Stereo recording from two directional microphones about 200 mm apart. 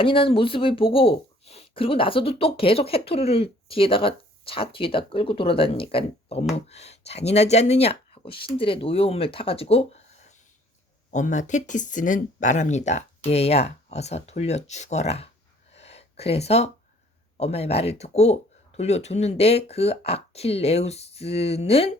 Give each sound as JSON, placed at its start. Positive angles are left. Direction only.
{"t": 0.0, "sound": "speech", "side_deg": 25}
{"t": 15.7, "sound": "a sound", "side_deg": 30}
{"t": 17.3, "sound": "speech", "side_deg": 30}